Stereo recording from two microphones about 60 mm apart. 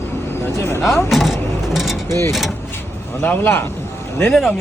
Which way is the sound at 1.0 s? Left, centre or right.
Centre.